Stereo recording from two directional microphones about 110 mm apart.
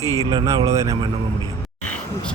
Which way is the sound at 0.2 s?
35° right (ahead or behind).